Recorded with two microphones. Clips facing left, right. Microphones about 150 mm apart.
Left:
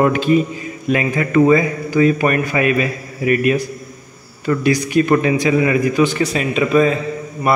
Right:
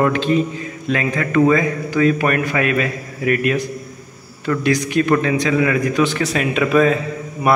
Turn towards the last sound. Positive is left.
turn(degrees=0)  # may be behind; listen again after turning